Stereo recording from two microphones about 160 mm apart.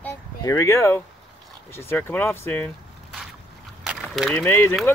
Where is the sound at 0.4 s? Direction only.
20° left (ahead or behind).